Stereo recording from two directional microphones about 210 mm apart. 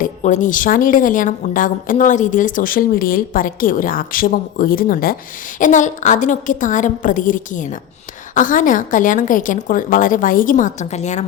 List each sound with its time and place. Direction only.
0.0 s a woman's voice: 35° left (ahead or behind)